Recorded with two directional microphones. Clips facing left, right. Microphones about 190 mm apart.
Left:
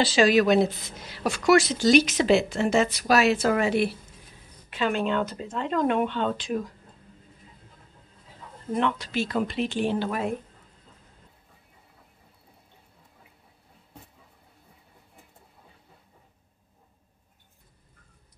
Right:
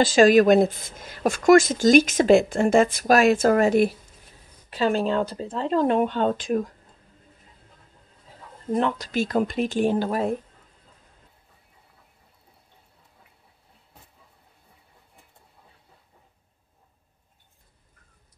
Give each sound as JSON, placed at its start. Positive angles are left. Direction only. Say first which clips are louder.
{"t": 0.0, "sound": "speech", "louder": "right 5 dB", "side_deg": -45}
{"t": 8.7, "sound": "speech", "louder": "right 2 dB", "side_deg": -40}